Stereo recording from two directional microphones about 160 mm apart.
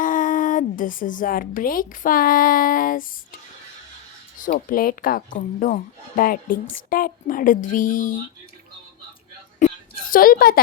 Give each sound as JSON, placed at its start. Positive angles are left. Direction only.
{"t": 0.0, "sound": "speech", "side_deg": 55}
{"t": 4.4, "sound": "speech", "side_deg": 60}
{"t": 9.6, "sound": "a sound", "side_deg": 55}